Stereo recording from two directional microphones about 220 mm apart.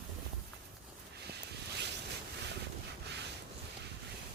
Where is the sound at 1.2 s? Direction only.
50° right (ahead or behind).